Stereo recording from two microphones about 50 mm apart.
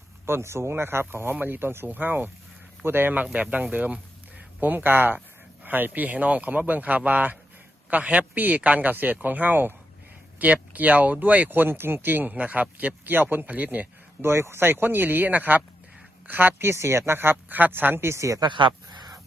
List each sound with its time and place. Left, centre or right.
0.3 s speech: right
3.3 s a man's voice: right
12.3 s a man's voice: right
14.2 s speech: right
18.1 s speech: right